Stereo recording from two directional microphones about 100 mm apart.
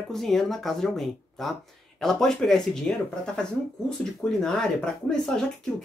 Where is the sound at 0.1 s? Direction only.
5° left (ahead or behind).